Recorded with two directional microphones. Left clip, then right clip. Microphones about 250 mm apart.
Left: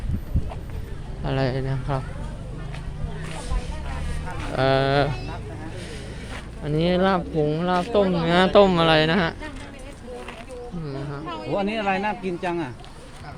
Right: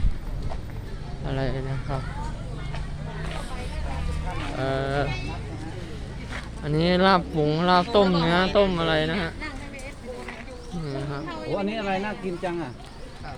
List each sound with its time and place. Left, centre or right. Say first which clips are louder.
1.2 s speech: left 5 dB; centre
4.5 s speech: left 7 dB; left
6.7 s speech: right 1 dB; centre
8.2 s speech: left 3 dB; centre
8.5 s speech: left 5 dB; left
10.8 s speech: right 3 dB; centre
11.3 s speech: left 4 dB; left